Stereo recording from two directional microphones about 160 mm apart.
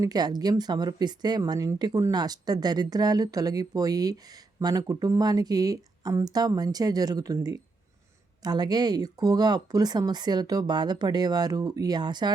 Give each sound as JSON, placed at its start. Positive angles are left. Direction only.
{"t": 0.0, "sound": "speech", "side_deg": -25}